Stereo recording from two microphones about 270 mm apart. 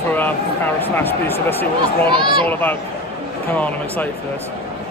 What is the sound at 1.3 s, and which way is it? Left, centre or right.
Speech, centre.